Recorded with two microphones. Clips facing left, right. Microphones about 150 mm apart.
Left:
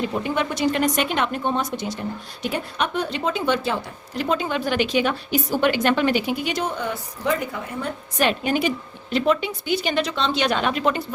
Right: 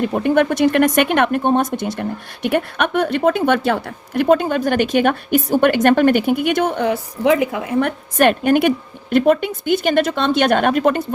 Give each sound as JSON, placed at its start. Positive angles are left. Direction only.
{"t": 0.0, "sound": "a woman's voice", "side_deg": -55}
{"t": 2.0, "sound": "a woman's voice", "side_deg": -65}